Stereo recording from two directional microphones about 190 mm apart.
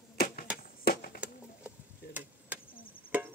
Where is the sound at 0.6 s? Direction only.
50° left (ahead or behind).